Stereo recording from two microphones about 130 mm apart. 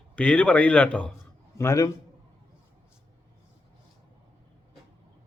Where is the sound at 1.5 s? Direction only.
25° left (ahead or behind).